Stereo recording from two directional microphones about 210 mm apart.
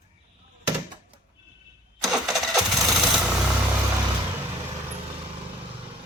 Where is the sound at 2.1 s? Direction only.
Centre (ahead or behind).